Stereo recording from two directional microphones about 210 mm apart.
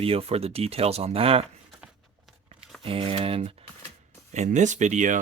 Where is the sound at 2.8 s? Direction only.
25° right (ahead or behind).